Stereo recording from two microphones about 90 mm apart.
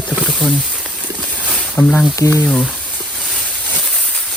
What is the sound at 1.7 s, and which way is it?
Speech, 15° left (ahead or behind).